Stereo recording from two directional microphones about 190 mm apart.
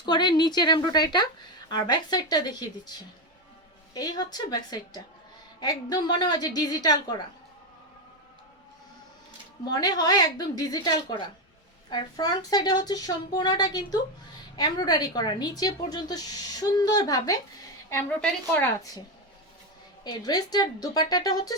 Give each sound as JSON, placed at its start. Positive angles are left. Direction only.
{"t": 0.0, "sound": "speech", "side_deg": 20}
{"t": 3.9, "sound": "speech", "side_deg": 20}
{"t": 9.7, "sound": "a woman's voice", "side_deg": 20}
{"t": 20.1, "sound": "speech", "side_deg": 20}